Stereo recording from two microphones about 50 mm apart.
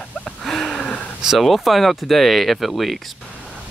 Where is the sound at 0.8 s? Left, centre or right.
Left.